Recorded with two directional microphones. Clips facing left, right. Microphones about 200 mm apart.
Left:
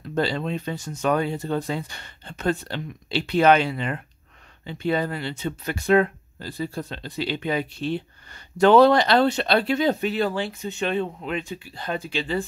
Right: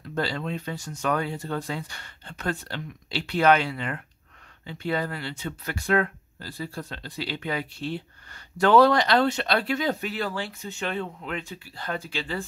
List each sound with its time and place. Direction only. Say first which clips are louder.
0.1 s speech: left 4 dB; 25° left (ahead or behind)